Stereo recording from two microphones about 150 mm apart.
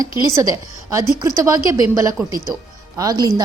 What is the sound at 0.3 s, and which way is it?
A woman's voice, 25° right (ahead or behind).